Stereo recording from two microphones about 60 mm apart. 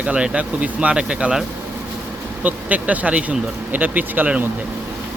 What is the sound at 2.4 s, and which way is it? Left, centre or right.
Speech, right.